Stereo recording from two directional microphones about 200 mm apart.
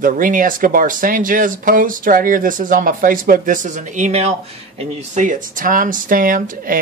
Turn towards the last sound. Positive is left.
turn(degrees=-45)  # may be behind; listen again after turning